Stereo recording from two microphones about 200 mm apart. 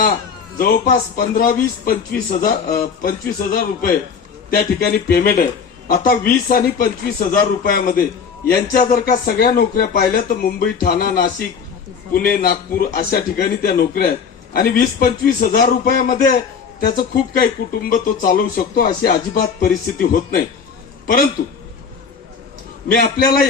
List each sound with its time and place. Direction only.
0.6 s speech: 45° left (ahead or behind)
22.9 s speech: 50° left (ahead or behind)